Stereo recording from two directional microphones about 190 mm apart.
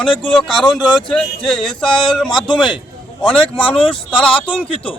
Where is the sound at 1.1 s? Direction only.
5° left (ahead or behind).